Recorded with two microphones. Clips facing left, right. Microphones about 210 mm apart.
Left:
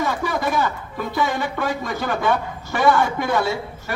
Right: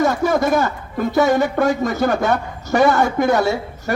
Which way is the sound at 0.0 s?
45° right (ahead or behind).